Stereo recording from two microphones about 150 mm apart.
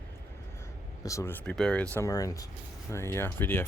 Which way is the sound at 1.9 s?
20° left (ahead or behind).